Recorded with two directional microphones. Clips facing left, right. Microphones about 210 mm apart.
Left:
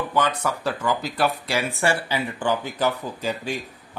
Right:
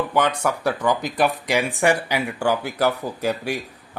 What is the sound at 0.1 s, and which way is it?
Speech, 10° right (ahead or behind).